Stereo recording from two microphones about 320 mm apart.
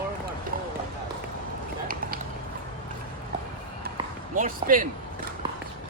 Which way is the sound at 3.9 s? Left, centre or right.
Right.